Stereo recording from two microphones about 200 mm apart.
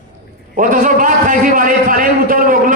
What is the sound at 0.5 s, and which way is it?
A man's voice, 40° right (ahead or behind).